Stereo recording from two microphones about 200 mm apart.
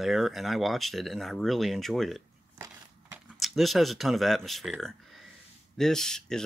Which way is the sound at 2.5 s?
15° right (ahead or behind).